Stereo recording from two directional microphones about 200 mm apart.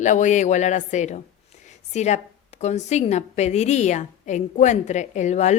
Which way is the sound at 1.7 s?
35° left (ahead or behind).